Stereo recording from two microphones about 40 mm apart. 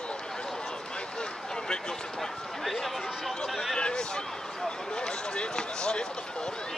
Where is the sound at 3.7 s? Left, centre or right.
Left.